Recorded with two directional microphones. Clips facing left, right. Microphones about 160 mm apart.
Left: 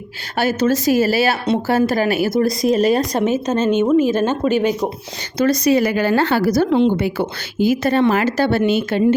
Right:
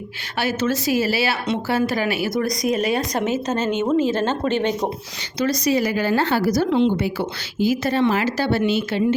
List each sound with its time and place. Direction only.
0.3 s a woman's voice: 45° left (ahead or behind)
2.3 s speech: 30° left (ahead or behind)
3.2 s speech: 20° left (ahead or behind)
5.4 s a woman's voice: 55° left (ahead or behind)